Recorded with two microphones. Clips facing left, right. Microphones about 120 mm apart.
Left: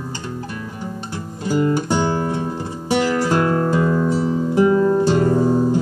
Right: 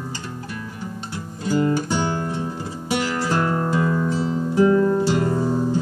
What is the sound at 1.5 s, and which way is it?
Music, 20° left (ahead or behind).